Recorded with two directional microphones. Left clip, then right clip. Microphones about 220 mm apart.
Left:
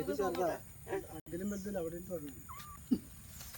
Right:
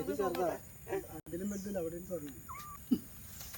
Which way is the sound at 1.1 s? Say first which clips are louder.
Even; 30° left (ahead or behind).